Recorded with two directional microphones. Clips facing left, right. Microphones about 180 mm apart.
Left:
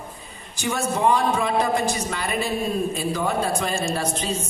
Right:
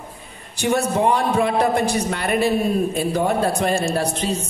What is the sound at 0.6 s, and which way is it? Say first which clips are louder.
A man's voice: right 5 dB; 60° right (ahead or behind).